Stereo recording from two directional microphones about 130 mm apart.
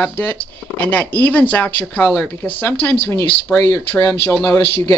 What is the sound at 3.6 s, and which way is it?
Speech, 25° left (ahead or behind).